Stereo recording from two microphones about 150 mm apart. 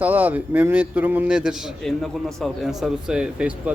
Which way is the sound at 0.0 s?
10° right (ahead or behind).